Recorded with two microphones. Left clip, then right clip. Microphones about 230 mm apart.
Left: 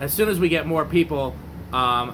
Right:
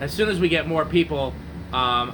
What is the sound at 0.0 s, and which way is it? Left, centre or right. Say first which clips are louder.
Speech: left 1 dB; left.